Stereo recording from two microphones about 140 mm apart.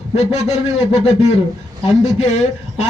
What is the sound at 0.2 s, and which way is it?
A man's voice, 50° left (ahead or behind).